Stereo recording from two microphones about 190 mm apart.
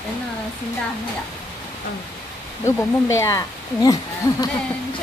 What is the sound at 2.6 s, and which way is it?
Speech, 15° left (ahead or behind).